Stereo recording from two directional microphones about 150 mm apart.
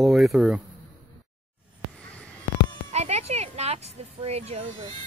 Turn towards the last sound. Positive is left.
turn(degrees=-45)  # may be behind; listen again after turning